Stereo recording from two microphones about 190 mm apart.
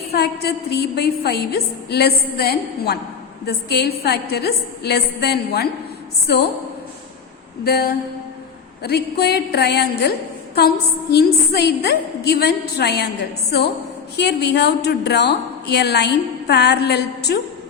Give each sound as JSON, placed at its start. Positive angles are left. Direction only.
{"t": 0.1, "sound": "a woman's voice", "side_deg": 55}
{"t": 7.6, "sound": "a woman's voice", "side_deg": 55}
{"t": 14.2, "sound": "a woman's voice", "side_deg": 60}